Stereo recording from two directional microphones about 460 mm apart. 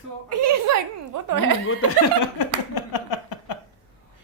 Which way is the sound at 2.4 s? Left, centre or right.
Left.